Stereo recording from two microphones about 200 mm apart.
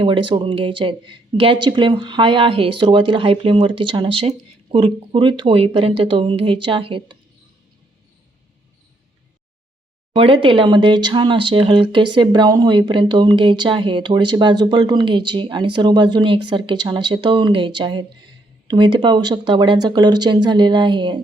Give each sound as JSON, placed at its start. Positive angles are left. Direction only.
{"t": 0.0, "sound": "speech", "side_deg": -25}
{"t": 10.2, "sound": "speech", "side_deg": -25}